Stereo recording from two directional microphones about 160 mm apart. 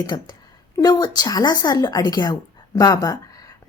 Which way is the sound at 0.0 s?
25° left (ahead or behind).